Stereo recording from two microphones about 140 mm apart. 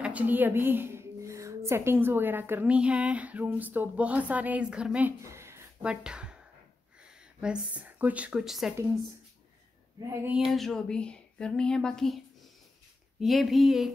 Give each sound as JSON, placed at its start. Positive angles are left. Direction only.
{"t": 0.0, "sound": "a woman's voice", "side_deg": -10}
{"t": 5.2, "sound": "a sound", "side_deg": -20}
{"t": 5.9, "sound": "speech", "side_deg": -5}
{"t": 10.2, "sound": "speech", "side_deg": -5}
{"t": 13.2, "sound": "speech", "side_deg": 0}